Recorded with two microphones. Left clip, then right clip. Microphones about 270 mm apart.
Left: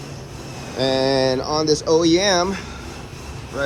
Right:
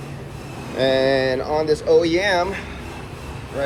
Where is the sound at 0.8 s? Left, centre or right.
Centre.